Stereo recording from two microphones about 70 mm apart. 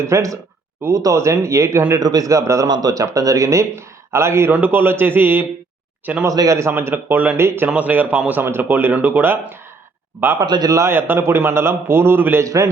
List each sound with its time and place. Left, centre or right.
0.0 s speech: right
2.0 s a man's voice: right
2.6 s speech: right
4.5 s a man's voice: right
6.2 s a man's voice: right
6.6 s a man's voice: right
7.7 s speech: right
8.4 s speech: right
10.4 s a man's voice: right
10.7 s speech: right
10.9 s a man's voice: right
12.5 s speech: right